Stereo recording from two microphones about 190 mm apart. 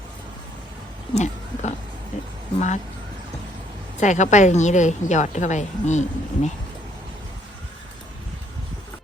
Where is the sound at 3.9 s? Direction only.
40° left (ahead or behind).